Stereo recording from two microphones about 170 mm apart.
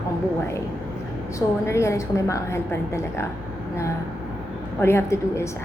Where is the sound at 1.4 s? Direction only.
15° left (ahead or behind).